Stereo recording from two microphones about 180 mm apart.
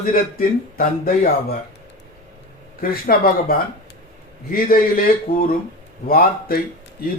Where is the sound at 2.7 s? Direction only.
55° left (ahead or behind).